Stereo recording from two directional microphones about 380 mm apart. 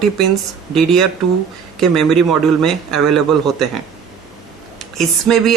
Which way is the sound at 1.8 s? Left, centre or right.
Centre.